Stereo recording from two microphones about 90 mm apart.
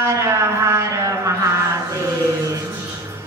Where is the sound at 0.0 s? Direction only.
30° right (ahead or behind).